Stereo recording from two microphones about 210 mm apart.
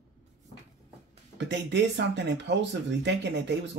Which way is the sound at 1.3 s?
55° right (ahead or behind).